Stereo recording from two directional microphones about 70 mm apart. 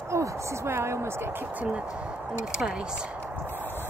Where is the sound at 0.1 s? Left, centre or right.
Right.